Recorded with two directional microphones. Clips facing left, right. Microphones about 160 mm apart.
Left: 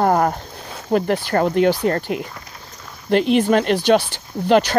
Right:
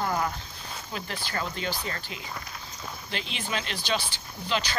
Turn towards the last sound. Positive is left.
turn(degrees=60)  # may be behind; listen again after turning